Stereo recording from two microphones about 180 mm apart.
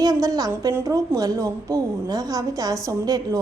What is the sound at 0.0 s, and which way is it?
A woman's voice, 20° right (ahead or behind).